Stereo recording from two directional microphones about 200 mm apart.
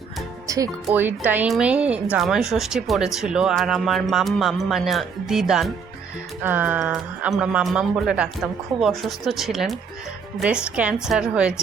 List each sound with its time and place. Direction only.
0.4 s music: 15° right (ahead or behind)
0.9 s a woman's voice: 10° right (ahead or behind)